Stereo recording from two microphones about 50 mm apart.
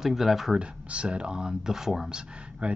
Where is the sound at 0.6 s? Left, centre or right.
Right; by 2.0 s centre.